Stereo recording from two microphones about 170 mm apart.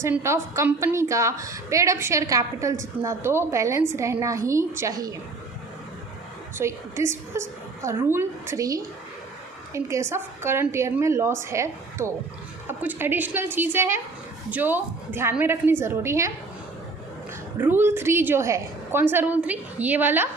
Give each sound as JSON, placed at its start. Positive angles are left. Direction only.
{"t": 0.0, "sound": "a woman's voice", "side_deg": -15}
{"t": 6.6, "sound": "a woman's voice", "side_deg": -15}
{"t": 17.6, "sound": "a woman's voice", "side_deg": -10}